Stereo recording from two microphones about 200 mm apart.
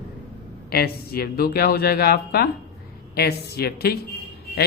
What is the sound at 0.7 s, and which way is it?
Speech, 50° left (ahead or behind).